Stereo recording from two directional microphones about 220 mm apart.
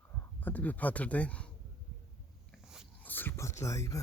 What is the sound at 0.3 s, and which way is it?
Speech, 5° left (ahead or behind).